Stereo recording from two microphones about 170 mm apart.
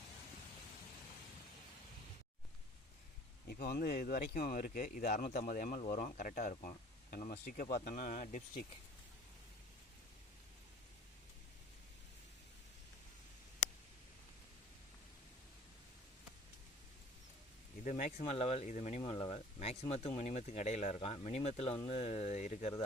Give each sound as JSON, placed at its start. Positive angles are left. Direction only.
{"t": 3.4, "sound": "speech", "side_deg": 65}
{"t": 7.9, "sound": "speech", "side_deg": 50}
{"t": 17.8, "sound": "speech", "side_deg": 45}
{"t": 18.2, "sound": "speech", "side_deg": 35}